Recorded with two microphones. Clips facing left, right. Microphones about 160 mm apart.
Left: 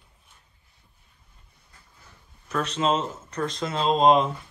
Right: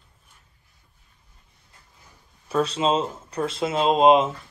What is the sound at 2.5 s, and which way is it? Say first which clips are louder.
Speech: right 5 dB; 30° right (ahead or behind).